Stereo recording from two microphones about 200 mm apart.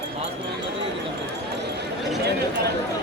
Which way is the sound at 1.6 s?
55° right (ahead or behind).